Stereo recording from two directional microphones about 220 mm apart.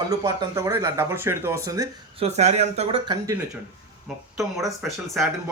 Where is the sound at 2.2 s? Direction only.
30° right (ahead or behind).